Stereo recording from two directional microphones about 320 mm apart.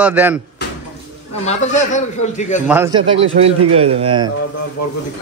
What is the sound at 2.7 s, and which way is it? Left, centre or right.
Speech, centre.